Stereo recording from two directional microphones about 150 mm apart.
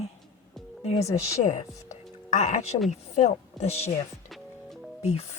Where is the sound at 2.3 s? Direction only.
55° left (ahead or behind).